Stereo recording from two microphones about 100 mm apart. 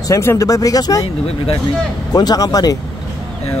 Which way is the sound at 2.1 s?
40° left (ahead or behind).